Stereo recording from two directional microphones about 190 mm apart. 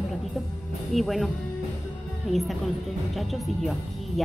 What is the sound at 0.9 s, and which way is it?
Speech, centre (ahead or behind).